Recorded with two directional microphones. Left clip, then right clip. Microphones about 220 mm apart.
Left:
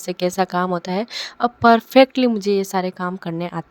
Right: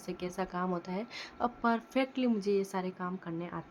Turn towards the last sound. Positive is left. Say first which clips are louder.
# left 13 dB
turn(degrees=45)  # may be behind; listen again after turning